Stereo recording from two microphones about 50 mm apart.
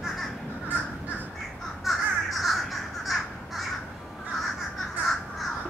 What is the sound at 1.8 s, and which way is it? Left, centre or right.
Crow, centre.